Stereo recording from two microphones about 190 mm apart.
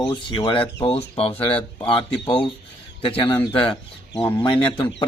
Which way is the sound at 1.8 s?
25° left (ahead or behind).